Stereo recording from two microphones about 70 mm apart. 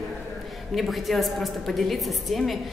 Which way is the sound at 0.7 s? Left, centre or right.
Centre.